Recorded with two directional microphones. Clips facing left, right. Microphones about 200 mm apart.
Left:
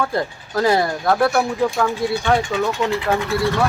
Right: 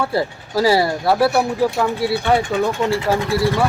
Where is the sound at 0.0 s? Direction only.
5° right (ahead or behind).